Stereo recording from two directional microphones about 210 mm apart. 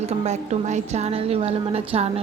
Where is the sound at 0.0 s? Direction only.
30° right (ahead or behind).